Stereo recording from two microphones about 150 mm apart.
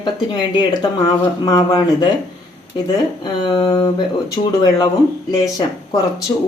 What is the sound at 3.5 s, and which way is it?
Speech, 30° left (ahead or behind).